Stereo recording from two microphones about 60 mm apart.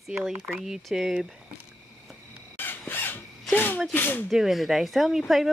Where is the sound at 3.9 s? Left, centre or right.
Left.